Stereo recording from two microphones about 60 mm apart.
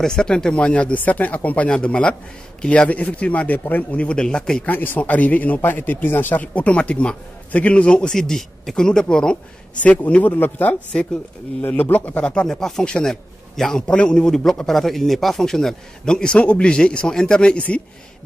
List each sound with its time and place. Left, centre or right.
0.0 s speech: centre
4.6 s speech: left; by 9.4 s centre
9.8 s a man's voice: left
12.2 s a man's voice: centre